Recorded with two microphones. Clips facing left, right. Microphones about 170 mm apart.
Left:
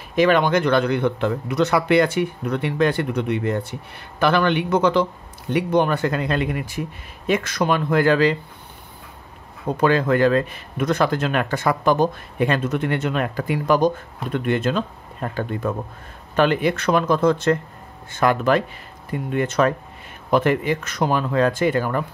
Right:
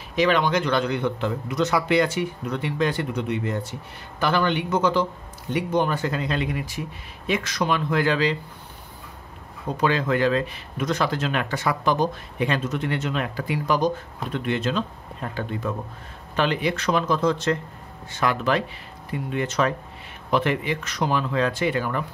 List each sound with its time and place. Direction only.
0.1 s speech: 50° left (ahead or behind)
9.8 s speech: 50° left (ahead or behind)